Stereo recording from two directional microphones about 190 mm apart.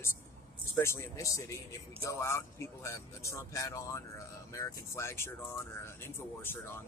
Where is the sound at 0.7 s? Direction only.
15° left (ahead or behind).